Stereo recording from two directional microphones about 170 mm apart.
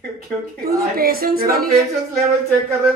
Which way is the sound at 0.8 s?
60° right (ahead or behind).